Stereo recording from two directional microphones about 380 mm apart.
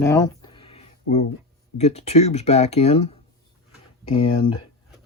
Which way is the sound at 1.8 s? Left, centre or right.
Centre.